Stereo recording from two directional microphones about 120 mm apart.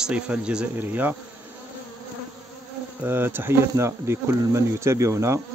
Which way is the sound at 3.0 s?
20° right (ahead or behind).